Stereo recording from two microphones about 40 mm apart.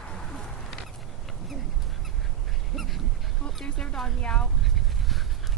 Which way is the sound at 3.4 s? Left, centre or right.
Left.